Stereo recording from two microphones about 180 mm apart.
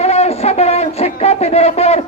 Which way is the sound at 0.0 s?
35° left (ahead or behind).